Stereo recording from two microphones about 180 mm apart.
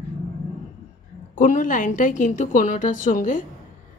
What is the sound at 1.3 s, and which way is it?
A woman's voice, 45° left (ahead or behind).